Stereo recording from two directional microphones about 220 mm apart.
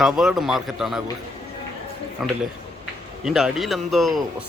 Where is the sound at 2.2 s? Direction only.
Centre (ahead or behind).